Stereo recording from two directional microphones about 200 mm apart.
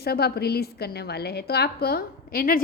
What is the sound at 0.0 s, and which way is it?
A woman's voice, 50° left (ahead or behind).